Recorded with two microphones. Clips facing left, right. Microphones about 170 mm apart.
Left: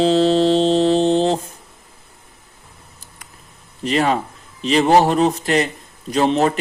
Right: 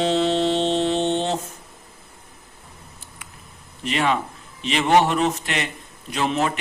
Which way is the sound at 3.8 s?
35° left (ahead or behind).